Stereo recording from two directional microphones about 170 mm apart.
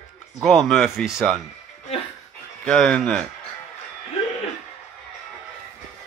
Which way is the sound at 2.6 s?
5° left (ahead or behind).